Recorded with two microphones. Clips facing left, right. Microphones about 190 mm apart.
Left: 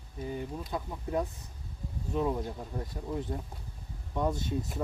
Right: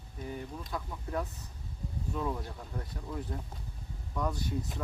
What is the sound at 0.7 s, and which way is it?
Speech, 20° left (ahead or behind).